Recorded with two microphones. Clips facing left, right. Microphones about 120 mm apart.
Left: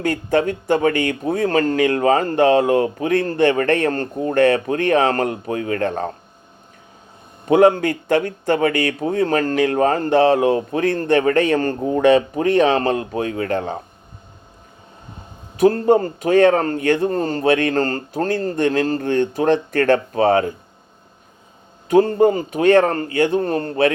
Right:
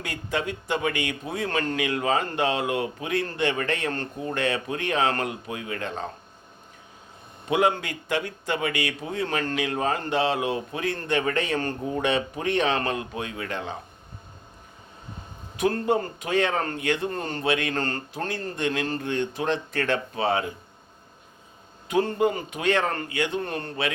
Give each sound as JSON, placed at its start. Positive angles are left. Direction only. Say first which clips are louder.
{"t": 0.0, "sound": "speech", "louder": "left 11 dB", "side_deg": 50}
{"t": 7.4, "sound": "speech", "louder": "left 10 dB", "side_deg": 45}
{"t": 15.5, "sound": "a man's voice", "louder": "left 9 dB", "side_deg": 40}
{"t": 21.8, "sound": "a man's voice", "louder": "left 9 dB", "side_deg": 45}